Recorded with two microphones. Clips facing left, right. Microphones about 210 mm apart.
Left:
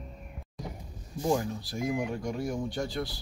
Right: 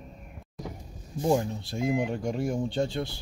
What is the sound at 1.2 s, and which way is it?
Speech, 25° right (ahead or behind).